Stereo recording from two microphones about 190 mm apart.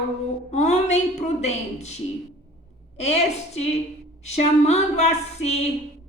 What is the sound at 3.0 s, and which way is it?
Child singing, 35° left (ahead or behind).